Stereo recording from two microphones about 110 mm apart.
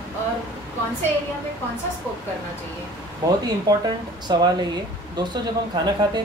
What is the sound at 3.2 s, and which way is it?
Speech, 30° right (ahead or behind).